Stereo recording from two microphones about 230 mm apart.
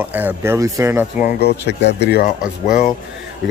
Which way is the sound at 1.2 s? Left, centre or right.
Left.